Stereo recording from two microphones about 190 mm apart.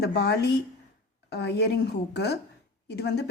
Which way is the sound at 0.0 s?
60° left (ahead or behind).